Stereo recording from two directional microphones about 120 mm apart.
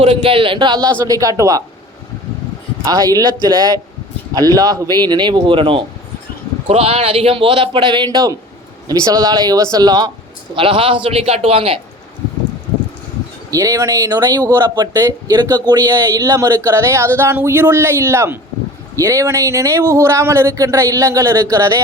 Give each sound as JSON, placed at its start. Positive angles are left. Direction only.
{"t": 0.0, "sound": "a man's voice", "side_deg": -50}
{"t": 1.0, "sound": "speech", "side_deg": -30}
{"t": 2.8, "sound": "a man's voice", "side_deg": -30}
{"t": 10.5, "sound": "a man's voice", "side_deg": -45}
{"t": 13.5, "sound": "speech", "side_deg": -25}